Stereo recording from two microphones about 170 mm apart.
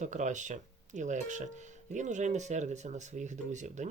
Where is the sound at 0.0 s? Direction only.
45° right (ahead or behind).